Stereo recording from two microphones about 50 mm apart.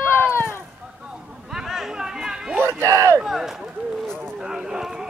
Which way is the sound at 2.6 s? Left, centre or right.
Right.